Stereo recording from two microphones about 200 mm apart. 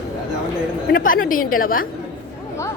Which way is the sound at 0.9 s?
45° left (ahead or behind).